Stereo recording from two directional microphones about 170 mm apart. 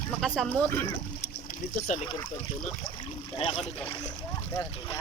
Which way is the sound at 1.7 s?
45° left (ahead or behind).